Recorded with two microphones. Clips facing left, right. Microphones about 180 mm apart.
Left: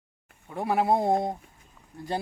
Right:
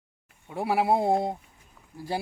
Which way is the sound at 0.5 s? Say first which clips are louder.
Even; 10° right (ahead or behind).